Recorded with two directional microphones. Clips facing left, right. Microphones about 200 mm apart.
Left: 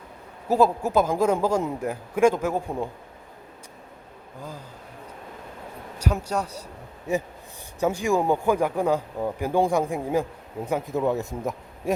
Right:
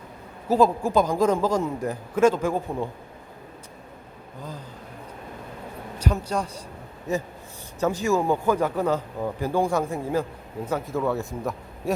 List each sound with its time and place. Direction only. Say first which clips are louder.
0.4 s a man's voice: right 1 dB; 10° left (ahead or behind)
6.0 s a man's voice: even; 10° left (ahead or behind)